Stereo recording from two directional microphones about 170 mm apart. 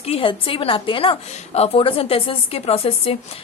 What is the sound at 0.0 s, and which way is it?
A woman's voice, 35° left (ahead or behind).